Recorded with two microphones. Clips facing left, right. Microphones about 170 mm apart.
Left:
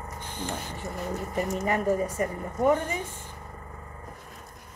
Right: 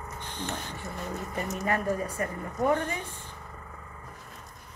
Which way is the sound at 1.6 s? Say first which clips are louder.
Left 2 dB; 15° left (ahead or behind).